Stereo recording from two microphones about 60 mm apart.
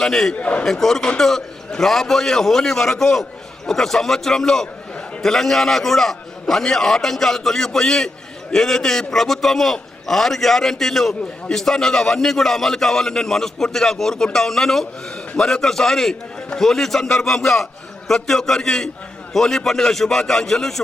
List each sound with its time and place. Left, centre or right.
0.0 s a man's voice: centre
0.3 s a man's voice: left
0.6 s a man's voice: centre